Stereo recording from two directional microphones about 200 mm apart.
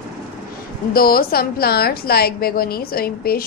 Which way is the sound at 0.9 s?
45° left (ahead or behind).